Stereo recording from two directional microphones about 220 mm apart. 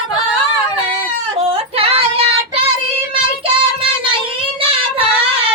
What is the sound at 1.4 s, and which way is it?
Child singing, 25° right (ahead or behind).